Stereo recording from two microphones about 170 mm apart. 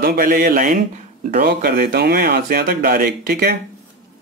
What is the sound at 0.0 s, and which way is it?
Speech, 60° right (ahead or behind).